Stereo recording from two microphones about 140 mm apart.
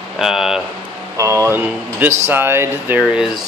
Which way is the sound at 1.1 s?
20° right (ahead or behind).